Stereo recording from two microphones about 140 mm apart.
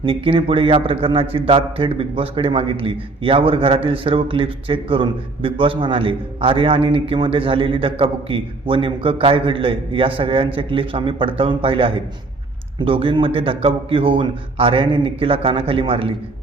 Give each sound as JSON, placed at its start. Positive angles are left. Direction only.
{"t": 0.0, "sound": "speech", "side_deg": -40}